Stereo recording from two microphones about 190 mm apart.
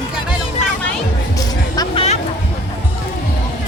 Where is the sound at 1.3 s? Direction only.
20° left (ahead or behind).